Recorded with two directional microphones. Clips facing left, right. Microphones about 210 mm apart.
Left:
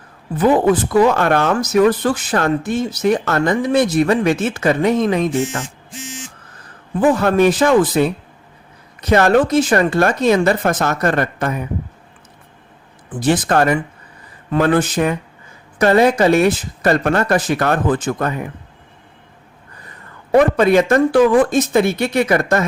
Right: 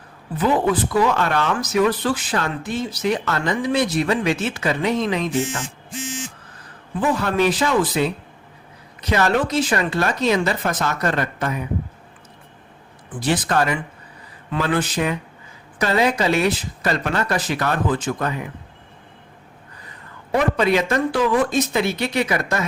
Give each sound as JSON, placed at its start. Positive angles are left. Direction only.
{"t": 0.3, "sound": "speech", "side_deg": 45}
{"t": 7.0, "sound": "speech", "side_deg": 50}
{"t": 13.2, "sound": "speech", "side_deg": 50}
{"t": 20.3, "sound": "speech", "side_deg": 50}